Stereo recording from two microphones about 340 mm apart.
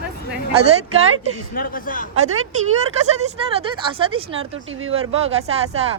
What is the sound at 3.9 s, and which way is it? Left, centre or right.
Speech, centre.